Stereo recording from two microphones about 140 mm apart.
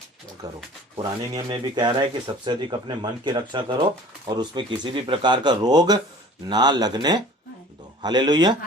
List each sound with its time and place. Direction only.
0.4 s speech: 25° right (ahead or behind)